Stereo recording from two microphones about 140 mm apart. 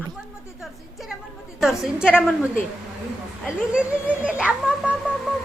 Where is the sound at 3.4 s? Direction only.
5° right (ahead or behind).